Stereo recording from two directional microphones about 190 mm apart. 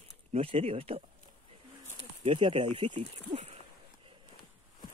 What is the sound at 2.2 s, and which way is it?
Speech, 30° right (ahead or behind).